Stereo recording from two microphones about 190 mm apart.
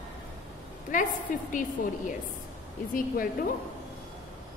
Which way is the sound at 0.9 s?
45° left (ahead or behind).